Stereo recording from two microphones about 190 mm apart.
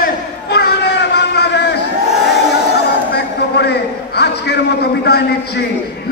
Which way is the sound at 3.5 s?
60° left (ahead or behind).